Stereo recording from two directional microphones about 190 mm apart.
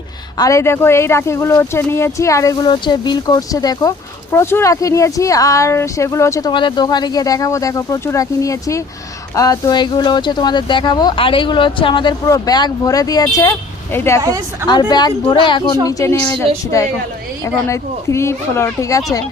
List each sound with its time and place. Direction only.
0.3 s speech: 15° left (ahead or behind)
14.2 s a woman's voice: 15° right (ahead or behind)
14.7 s speech: 20° left (ahead or behind)
17.4 s speech: 15° left (ahead or behind)